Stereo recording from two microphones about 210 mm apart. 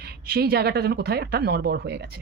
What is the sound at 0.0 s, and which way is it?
Speech, 50° right (ahead or behind).